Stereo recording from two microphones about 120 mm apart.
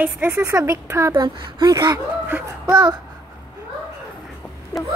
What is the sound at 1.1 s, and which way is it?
A woman's voice, 40° right (ahead or behind).